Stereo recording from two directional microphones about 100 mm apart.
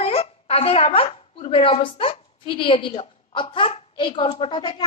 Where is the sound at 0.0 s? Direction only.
80° left.